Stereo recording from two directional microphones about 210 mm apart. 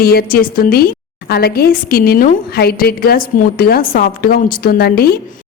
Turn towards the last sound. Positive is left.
turn(degrees=45)  # may be behind; listen again after turning